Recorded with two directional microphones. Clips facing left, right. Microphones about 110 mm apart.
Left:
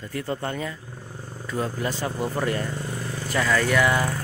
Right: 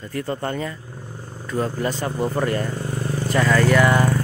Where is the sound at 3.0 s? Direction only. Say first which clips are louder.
Right 7 dB; 45° right (ahead or behind).